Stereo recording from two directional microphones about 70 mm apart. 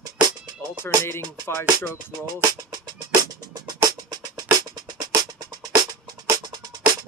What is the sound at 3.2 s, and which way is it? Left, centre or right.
Music, right.